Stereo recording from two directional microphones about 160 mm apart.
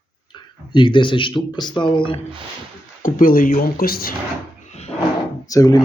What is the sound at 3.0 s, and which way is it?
Speech, 60° left (ahead or behind).